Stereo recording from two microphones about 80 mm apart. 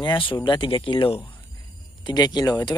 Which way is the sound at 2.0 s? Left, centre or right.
Left.